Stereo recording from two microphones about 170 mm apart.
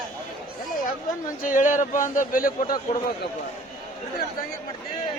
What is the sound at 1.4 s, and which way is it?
Speech, 50° left (ahead or behind).